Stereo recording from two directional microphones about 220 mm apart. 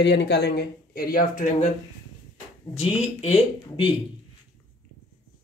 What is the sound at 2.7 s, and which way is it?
Speech, 30° left (ahead or behind).